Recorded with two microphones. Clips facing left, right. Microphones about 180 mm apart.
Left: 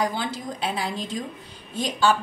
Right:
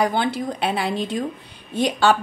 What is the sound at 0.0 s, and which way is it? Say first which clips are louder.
Speech: right 6 dB; 65° right (ahead or behind).